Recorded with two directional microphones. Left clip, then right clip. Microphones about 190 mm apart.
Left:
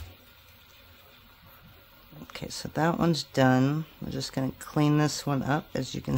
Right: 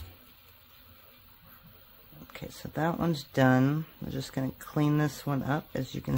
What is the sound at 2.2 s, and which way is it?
Speech, 10° left (ahead or behind).